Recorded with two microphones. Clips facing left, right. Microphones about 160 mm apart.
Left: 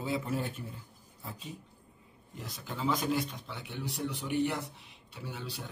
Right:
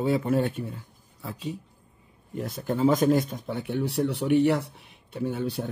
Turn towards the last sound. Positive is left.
turn(degrees=-50)  # may be behind; listen again after turning